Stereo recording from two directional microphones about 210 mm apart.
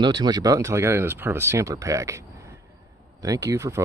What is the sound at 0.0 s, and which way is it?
Speech, 20° right (ahead or behind).